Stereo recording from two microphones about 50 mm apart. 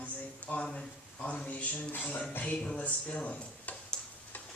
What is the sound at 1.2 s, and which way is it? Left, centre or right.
Speech, left.